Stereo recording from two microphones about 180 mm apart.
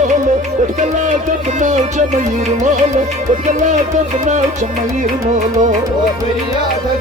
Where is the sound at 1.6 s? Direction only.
45° right (ahead or behind).